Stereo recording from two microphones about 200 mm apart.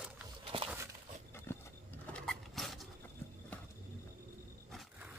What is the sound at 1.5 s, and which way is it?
Horse, 5° left (ahead or behind).